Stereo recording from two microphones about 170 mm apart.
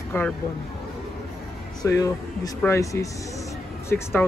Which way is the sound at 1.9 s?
20° left (ahead or behind).